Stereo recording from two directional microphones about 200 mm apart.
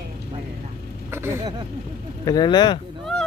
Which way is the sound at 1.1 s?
10° right (ahead or behind).